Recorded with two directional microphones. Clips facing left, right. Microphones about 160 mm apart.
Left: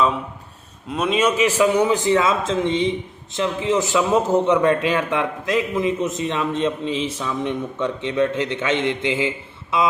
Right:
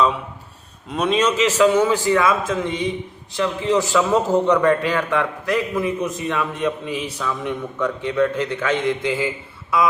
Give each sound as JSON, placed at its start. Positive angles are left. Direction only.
{"t": 0.9, "sound": "a man's voice", "side_deg": 0}